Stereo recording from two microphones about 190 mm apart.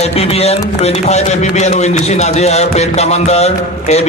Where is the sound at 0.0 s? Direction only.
30° left (ahead or behind).